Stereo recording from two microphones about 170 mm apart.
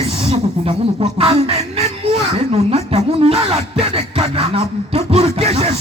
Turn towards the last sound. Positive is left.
turn(degrees=-35)  # may be behind; listen again after turning